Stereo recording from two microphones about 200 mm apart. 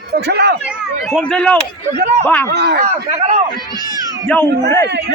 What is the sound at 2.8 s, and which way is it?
Speech, 35° right (ahead or behind).